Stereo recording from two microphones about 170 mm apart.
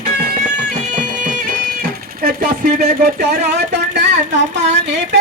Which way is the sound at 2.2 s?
60° right (ahead or behind).